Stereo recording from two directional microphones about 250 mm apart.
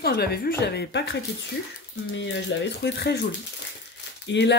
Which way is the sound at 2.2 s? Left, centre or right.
Left.